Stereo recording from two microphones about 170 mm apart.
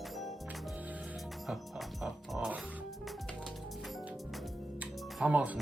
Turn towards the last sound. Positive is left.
turn(degrees=-5)  # may be behind; listen again after turning